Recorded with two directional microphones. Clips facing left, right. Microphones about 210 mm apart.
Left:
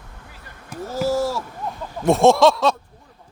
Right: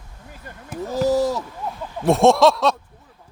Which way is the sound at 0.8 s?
15° right (ahead or behind).